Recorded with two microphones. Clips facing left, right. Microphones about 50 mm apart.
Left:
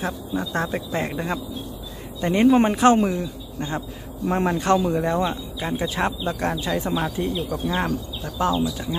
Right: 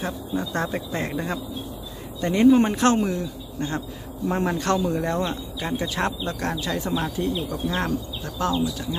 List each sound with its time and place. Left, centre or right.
0.0 s speech: centre
7.3 s speech: centre
8.5 s speech: centre